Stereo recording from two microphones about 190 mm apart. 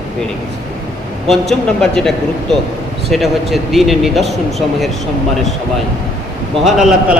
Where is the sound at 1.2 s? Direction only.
Centre (ahead or behind).